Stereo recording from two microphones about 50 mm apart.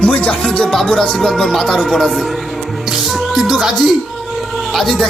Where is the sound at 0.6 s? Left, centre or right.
Centre.